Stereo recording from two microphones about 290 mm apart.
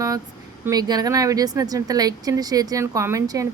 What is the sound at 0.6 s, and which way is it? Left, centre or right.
Speech, centre.